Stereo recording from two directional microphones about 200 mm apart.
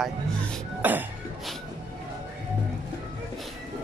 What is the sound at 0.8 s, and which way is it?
Music, 10° right (ahead or behind).